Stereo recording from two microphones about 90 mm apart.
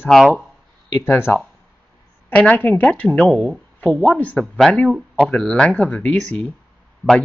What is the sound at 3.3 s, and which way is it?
Speech, 10° right (ahead or behind).